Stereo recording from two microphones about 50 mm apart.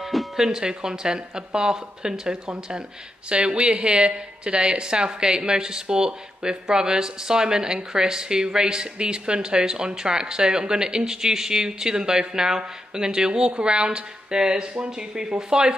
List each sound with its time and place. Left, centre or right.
0.0 s music: centre
0.5 s a woman's voice: centre